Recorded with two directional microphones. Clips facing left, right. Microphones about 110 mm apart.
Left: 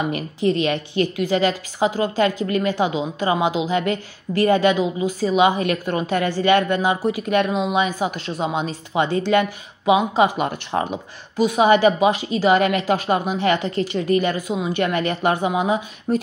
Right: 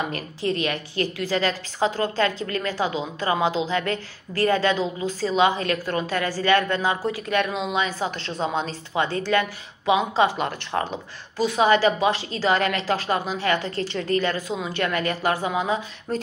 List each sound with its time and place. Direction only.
0.1 s a woman's voice: 20° left (ahead or behind)